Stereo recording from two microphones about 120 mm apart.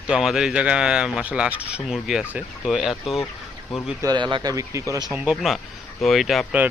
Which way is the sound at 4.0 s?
35° right (ahead or behind).